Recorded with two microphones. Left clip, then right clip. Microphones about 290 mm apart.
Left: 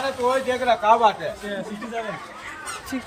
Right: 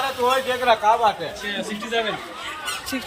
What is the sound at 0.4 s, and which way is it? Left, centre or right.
Speech, right.